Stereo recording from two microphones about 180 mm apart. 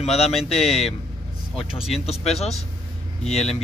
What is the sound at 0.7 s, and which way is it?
Speech, 35° left (ahead or behind).